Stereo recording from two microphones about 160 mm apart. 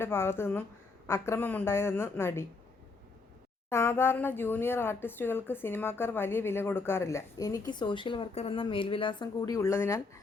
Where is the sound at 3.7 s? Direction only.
15° left (ahead or behind).